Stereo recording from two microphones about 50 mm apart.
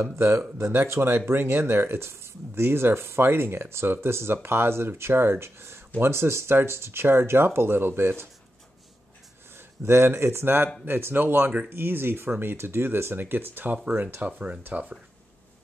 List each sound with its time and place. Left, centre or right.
0.0 s speech: right
1.1 s speech: right
9.8 s speech: right
14.2 s speech: right